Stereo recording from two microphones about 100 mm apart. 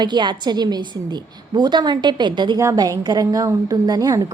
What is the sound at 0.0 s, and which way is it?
A woman's voice, 50° right (ahead or behind).